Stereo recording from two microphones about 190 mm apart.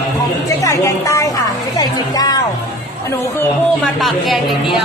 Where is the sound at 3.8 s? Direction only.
Centre (ahead or behind).